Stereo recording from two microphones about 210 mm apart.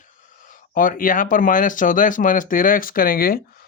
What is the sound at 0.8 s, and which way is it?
Speech, 40° left (ahead or behind).